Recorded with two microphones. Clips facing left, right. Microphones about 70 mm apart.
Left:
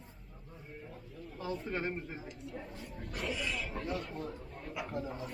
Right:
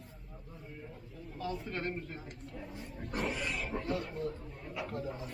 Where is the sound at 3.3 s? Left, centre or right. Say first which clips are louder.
Even; right.